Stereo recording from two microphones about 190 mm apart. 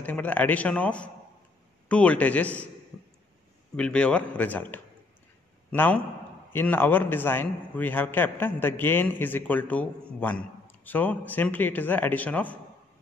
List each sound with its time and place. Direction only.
0.0 s a man's voice: 10° left (ahead or behind)
3.7 s a man's voice: 5° left (ahead or behind)